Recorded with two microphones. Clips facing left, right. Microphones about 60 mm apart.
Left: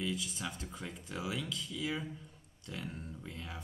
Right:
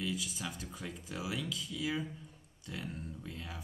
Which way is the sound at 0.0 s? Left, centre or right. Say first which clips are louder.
Even; centre.